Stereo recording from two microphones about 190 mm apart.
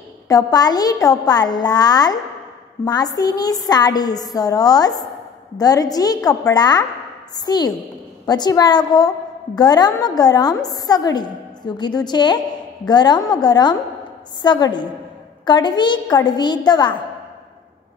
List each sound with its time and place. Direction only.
0.3 s a woman's voice: 20° left (ahead or behind)